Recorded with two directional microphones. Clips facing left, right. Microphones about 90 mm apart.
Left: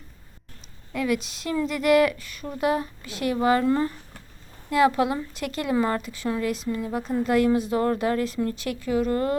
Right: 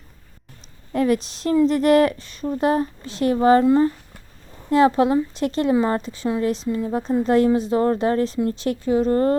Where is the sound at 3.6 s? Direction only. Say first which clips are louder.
Right 6 dB; 25° right (ahead or behind).